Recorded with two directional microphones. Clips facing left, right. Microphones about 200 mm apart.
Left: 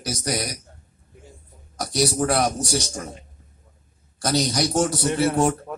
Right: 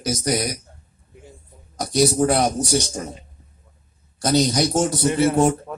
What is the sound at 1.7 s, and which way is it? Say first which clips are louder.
A man's voice: right 4 dB; 20° right (ahead or behind).